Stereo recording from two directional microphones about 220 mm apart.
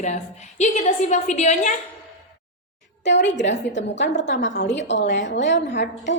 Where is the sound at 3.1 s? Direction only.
55° left (ahead or behind).